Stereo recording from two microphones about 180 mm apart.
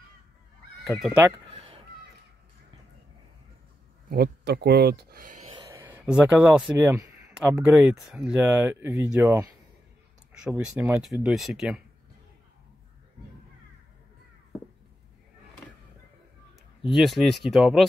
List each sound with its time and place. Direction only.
0.8 s speech: centre (ahead or behind)
4.1 s speech: 65° right (ahead or behind); by 5.5 s 45° right (ahead or behind)
5.7 s speech: 10° right (ahead or behind)
6.9 s a sound: 15° right (ahead or behind)
7.3 s speech: 5° right (ahead or behind)
10.4 s speech: 5° right (ahead or behind)
16.8 s speech: centre (ahead or behind)